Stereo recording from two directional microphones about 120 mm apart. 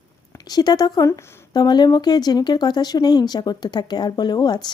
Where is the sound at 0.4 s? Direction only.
35° left (ahead or behind).